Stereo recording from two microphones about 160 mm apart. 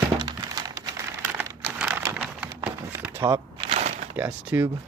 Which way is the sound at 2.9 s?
15° right (ahead or behind).